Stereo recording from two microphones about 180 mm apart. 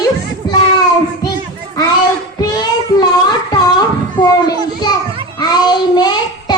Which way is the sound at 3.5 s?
25° left (ahead or behind).